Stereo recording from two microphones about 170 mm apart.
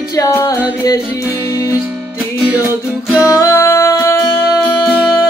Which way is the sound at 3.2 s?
15° left (ahead or behind).